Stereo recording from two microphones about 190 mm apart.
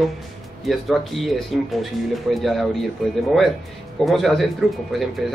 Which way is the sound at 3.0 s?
Centre (ahead or behind).